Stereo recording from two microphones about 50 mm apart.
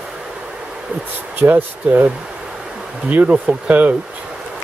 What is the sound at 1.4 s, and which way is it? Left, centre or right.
Speech, right.